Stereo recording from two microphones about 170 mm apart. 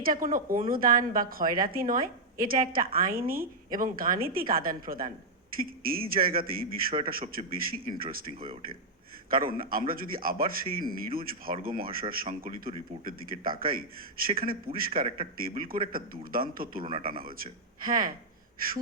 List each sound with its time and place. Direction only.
0.0 s a woman's voice: 55° right (ahead or behind)
9.3 s a woman's voice: 55° right (ahead or behind)